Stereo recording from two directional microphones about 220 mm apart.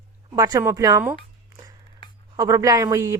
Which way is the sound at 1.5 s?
15° right (ahead or behind).